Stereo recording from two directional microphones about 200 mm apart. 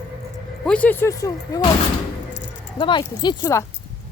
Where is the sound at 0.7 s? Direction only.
5° left (ahead or behind).